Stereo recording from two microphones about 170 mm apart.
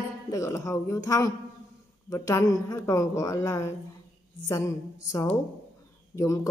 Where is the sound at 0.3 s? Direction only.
20° left (ahead or behind).